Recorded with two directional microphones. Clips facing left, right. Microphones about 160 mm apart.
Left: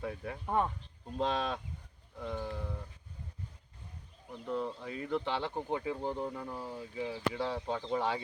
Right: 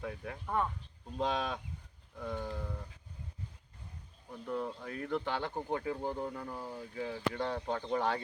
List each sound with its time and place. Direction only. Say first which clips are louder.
0.0 s speech: left 2 dB; centre (ahead or behind)
0.4 s speech: left 2 dB; 25° left (ahead or behind)
1.2 s speech: left 1 dB; centre (ahead or behind)
4.3 s speech: left 1 dB; 5° right (ahead or behind)
6.0 s speech: left 1 dB; 5° right (ahead or behind)